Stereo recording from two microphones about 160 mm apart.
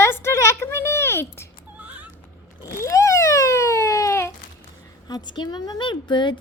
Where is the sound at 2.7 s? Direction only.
20° left (ahead or behind).